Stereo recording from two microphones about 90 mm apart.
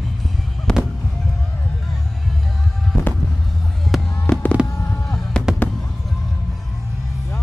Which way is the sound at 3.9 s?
Centre (ahead or behind).